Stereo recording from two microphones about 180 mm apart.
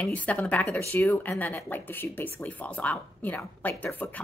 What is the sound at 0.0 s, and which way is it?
Speech, 10° left (ahead or behind).